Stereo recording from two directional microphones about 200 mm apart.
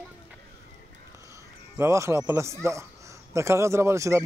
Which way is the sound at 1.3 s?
15° right (ahead or behind).